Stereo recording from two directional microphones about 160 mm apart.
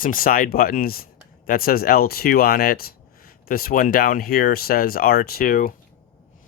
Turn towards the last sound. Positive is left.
turn(degrees=60)  # may be behind; listen again after turning